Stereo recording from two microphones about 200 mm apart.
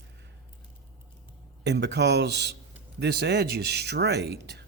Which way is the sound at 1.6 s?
60° right (ahead or behind).